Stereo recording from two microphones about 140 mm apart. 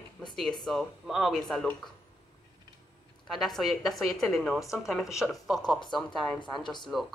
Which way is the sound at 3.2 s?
Centre (ahead or behind).